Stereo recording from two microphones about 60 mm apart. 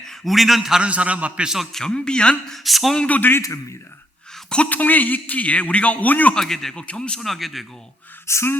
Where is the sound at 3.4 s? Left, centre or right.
Left.